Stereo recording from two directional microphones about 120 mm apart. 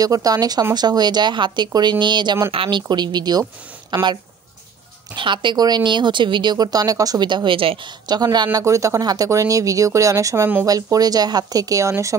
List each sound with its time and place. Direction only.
0.0 s speech: 30° right (ahead or behind); by 2.8 s 50° right (ahead or behind)
2.9 s speech: 35° right (ahead or behind)